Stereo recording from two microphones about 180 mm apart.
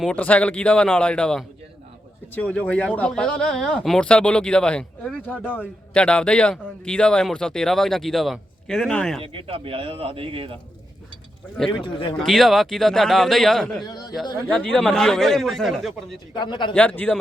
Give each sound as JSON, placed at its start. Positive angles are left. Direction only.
{"t": 0.0, "sound": "a man's voice", "side_deg": 5}
{"t": 9.2, "sound": "a man's voice", "side_deg": -30}
{"t": 11.8, "sound": "a man's voice", "side_deg": 30}
{"t": 12.2, "sound": "a man's voice", "side_deg": 0}
{"t": 13.8, "sound": "a man's voice", "side_deg": 20}
{"t": 14.4, "sound": "a man's voice", "side_deg": 5}
{"t": 16.3, "sound": "a man's voice", "side_deg": 25}
{"t": 16.7, "sound": "speech", "side_deg": 10}